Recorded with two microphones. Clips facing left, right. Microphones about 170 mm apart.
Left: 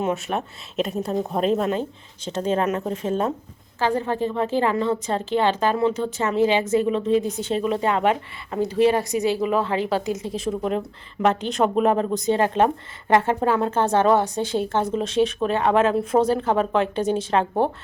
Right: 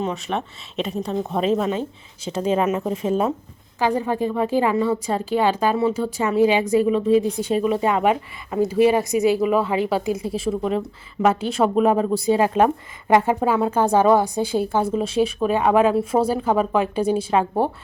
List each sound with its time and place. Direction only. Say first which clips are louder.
0.0 s speech: left 1 dB; 5° left (ahead or behind)